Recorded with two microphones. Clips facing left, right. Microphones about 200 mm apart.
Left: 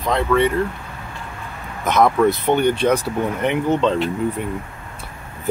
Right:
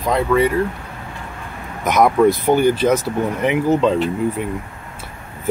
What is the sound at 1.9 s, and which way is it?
Speech, 10° right (ahead or behind).